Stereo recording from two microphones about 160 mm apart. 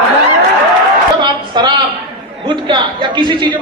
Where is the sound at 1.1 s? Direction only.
25° right (ahead or behind).